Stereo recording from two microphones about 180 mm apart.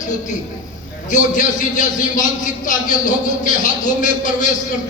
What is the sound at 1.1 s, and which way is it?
A man's voice, 45° left (ahead or behind).